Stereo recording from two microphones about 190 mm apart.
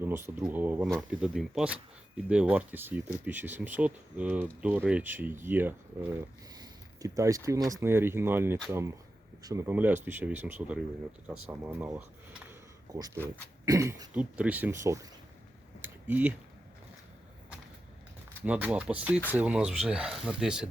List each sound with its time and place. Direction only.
0.0 s speech: 10° right (ahead or behind)
6.5 s a sound: 20° right (ahead or behind)
7.7 s speech: 15° right (ahead or behind)
13.1 s speech: 10° left (ahead or behind)
13.7 s speech: 15° right (ahead or behind)
15.8 s a sound: 10° right (ahead or behind)
18.4 s speech: 5° right (ahead or behind)